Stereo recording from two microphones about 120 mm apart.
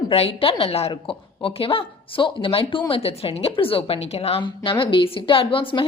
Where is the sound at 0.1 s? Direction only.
50° left (ahead or behind).